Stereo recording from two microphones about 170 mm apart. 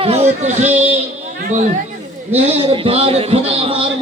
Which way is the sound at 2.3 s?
35° right (ahead or behind).